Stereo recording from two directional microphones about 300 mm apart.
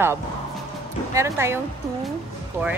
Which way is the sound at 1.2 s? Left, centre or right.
Centre.